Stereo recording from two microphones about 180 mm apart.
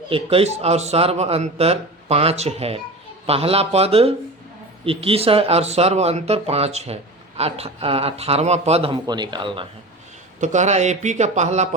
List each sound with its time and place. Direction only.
0.1 s speech: 30° right (ahead or behind)
10.4 s speech: 40° right (ahead or behind)